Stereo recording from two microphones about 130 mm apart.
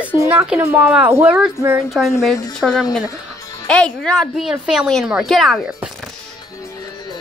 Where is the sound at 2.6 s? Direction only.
Centre (ahead or behind).